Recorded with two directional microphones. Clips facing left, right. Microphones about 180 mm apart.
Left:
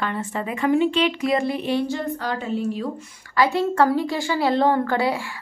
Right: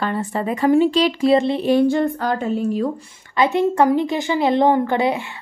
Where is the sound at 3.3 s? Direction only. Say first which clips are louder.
Right 3 dB; 20° right (ahead or behind).